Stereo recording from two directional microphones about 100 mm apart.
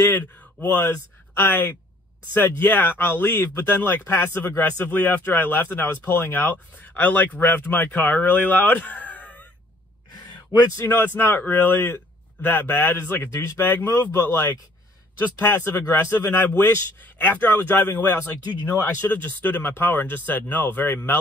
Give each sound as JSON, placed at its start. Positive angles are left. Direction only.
{"t": 0.4, "sound": "speech", "side_deg": 15}
{"t": 10.8, "sound": "speech", "side_deg": 20}